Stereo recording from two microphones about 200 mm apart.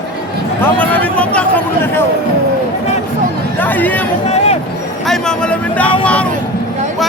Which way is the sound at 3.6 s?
10° left (ahead or behind).